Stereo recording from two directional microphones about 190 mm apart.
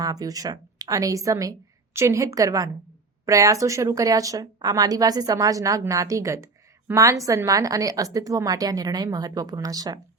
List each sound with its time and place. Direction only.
0.0 s a woman's voice: 20° right (ahead or behind)